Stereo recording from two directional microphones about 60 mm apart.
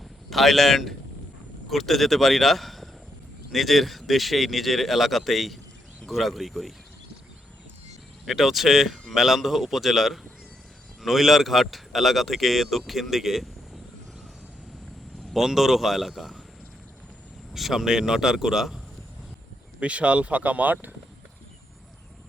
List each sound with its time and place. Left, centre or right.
0.3 s speech: centre
8.2 s speech: centre
15.3 s speech: centre
17.5 s speech: centre
19.8 s speech: right